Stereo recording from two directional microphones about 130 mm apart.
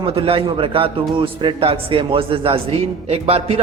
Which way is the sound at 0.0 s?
45° right (ahead or behind).